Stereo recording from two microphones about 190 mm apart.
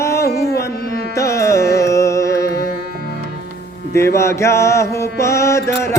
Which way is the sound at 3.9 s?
15° left (ahead or behind).